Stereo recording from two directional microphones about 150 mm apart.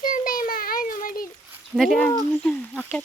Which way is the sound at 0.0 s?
65° left (ahead or behind).